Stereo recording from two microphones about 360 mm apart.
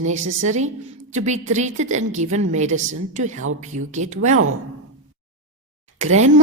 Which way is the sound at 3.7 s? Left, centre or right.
Right.